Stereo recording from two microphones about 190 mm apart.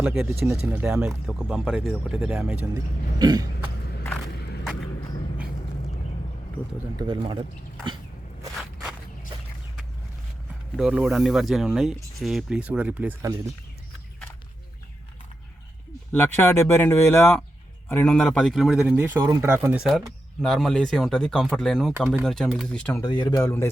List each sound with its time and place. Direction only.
0.0 s speech: centre (ahead or behind)
2.7 s a man's voice: 20° right (ahead or behind)
4.6 s a sound: centre (ahead or behind)
8.5 s walk: centre (ahead or behind)
10.8 s speech: centre (ahead or behind)
16.1 s speech: 10° left (ahead or behind)
21.9 s speech: 10° right (ahead or behind)
22.2 s speech: centre (ahead or behind)
23.0 s speech: 25° left (ahead or behind)